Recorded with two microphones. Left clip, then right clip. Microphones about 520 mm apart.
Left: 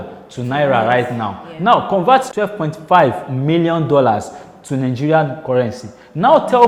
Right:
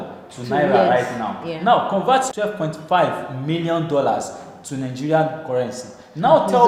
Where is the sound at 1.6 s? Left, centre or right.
Left.